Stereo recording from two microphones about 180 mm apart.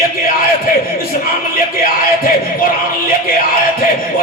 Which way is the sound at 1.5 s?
55° left (ahead or behind).